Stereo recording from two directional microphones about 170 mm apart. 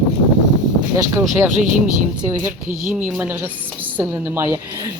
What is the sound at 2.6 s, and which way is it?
Speech, 50° right (ahead or behind).